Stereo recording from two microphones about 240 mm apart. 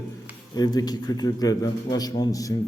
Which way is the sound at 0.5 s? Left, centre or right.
Centre.